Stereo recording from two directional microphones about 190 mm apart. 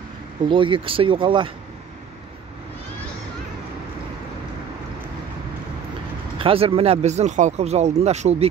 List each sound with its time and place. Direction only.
0.5 s speech: 25° right (ahead or behind)
6.3 s speech: 30° right (ahead or behind)